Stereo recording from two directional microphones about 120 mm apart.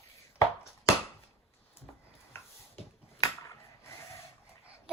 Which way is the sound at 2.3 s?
20° left (ahead or behind).